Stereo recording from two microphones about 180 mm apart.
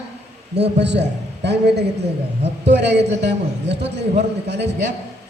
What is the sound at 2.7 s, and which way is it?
Speech, 70° right (ahead or behind).